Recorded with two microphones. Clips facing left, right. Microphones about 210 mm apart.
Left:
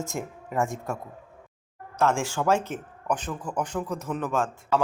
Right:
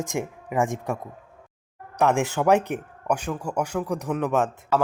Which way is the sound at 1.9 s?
20° right (ahead or behind).